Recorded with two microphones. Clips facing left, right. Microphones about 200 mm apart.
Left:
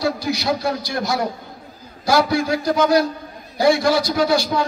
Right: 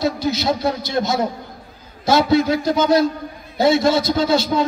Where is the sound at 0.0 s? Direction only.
25° right (ahead or behind).